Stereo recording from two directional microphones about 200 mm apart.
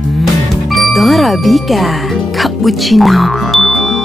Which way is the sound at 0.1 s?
Centre (ahead or behind).